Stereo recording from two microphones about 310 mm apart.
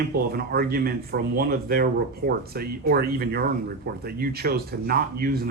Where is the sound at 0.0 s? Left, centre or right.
Right.